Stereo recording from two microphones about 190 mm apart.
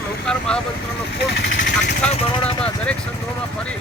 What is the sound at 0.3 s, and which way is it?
Speech, 5° left (ahead or behind).